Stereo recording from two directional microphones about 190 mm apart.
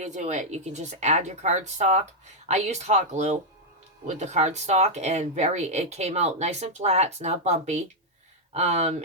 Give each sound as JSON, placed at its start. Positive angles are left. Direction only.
{"t": 0.0, "sound": "speech", "side_deg": -35}